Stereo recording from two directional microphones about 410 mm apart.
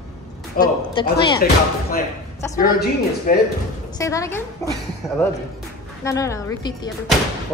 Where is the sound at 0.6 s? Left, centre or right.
Centre.